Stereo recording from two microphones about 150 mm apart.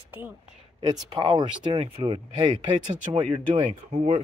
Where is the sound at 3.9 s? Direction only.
40° right (ahead or behind).